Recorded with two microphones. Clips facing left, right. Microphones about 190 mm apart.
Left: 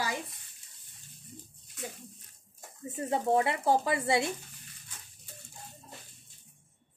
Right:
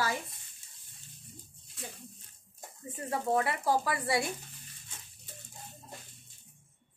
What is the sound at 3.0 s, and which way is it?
Speech, 25° left (ahead or behind).